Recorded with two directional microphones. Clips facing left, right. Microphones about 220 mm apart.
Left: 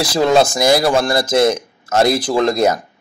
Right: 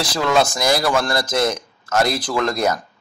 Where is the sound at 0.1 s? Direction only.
30° left (ahead or behind).